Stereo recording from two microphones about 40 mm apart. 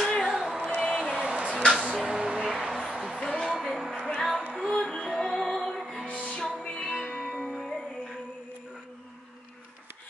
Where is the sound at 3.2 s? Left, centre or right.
Centre.